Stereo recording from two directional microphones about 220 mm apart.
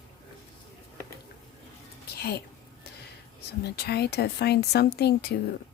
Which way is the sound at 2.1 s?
45° left (ahead or behind).